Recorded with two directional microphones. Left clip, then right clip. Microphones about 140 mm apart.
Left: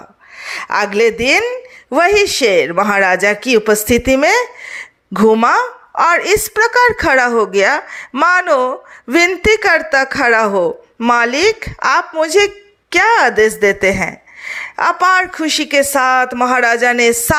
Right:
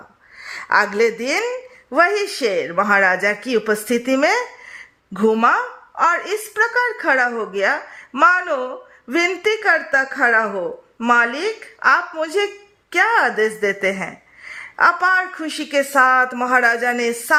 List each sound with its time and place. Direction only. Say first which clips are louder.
0.3 s a woman's voice: left 1 dB; 20° left (ahead or behind)